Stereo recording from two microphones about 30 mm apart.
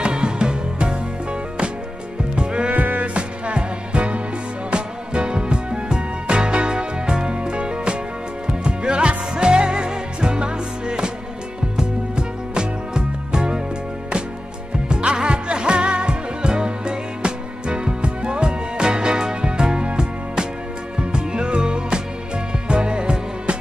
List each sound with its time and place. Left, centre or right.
0.0 s music: right
2.7 s music: right
3.2 s music: right
14.9 s music: right